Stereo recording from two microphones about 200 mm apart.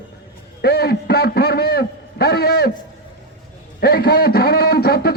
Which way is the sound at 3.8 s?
50° left (ahead or behind).